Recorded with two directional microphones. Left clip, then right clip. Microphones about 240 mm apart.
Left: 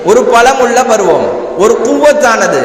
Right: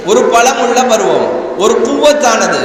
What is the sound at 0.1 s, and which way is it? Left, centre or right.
A man's voice, left.